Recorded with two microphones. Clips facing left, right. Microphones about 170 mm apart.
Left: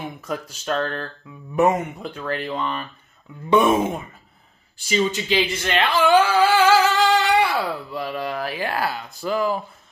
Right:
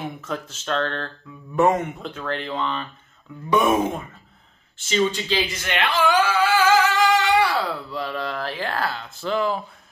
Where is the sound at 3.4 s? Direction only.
30° left (ahead or behind).